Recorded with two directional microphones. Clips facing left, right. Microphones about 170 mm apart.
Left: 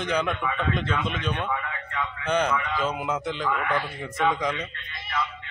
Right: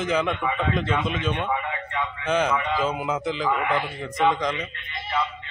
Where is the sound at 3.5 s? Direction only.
20° right (ahead or behind).